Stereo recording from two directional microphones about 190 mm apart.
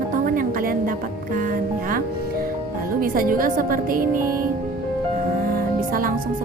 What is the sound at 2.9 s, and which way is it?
Speech, 50° right (ahead or behind).